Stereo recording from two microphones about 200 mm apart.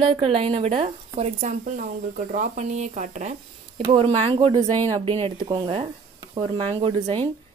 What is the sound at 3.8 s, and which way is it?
Speech, 25° right (ahead or behind).